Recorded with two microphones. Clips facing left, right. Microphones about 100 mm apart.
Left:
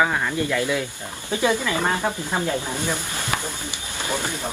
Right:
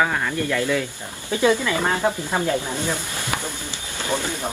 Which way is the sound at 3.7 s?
15° left (ahead or behind).